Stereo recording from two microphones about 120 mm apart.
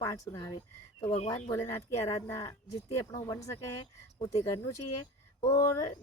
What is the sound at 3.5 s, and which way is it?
Speech, 50° left (ahead or behind).